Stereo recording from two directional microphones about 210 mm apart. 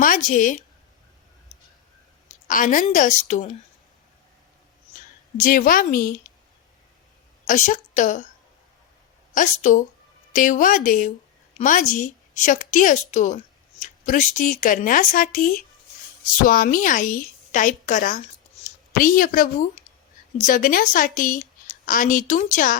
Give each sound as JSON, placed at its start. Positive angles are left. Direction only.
{"t": 0.0, "sound": "a woman's voice", "side_deg": 40}
{"t": 1.5, "sound": "a sound", "side_deg": 35}
{"t": 2.9, "sound": "a woman's voice", "side_deg": 35}
{"t": 5.4, "sound": "a woman's voice", "side_deg": 40}
{"t": 7.4, "sound": "a woman's voice", "side_deg": 40}
{"t": 9.3, "sound": "a woman's voice", "side_deg": 35}